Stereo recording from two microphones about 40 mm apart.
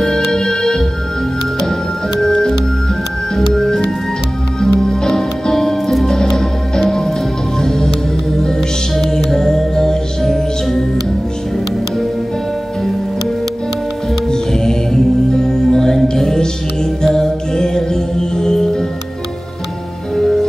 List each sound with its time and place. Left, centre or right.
0.0 s music: centre
14.3 s music: centre